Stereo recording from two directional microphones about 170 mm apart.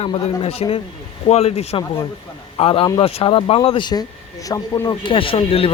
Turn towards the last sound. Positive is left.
turn(degrees=35)  # may be behind; listen again after turning